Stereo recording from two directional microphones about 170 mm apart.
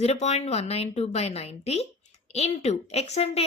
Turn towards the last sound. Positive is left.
turn(degrees=40)  # may be behind; listen again after turning